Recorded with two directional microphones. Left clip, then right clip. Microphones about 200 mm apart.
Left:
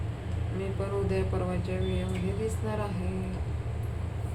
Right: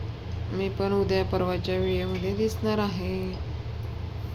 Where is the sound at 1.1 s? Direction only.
50° right (ahead or behind).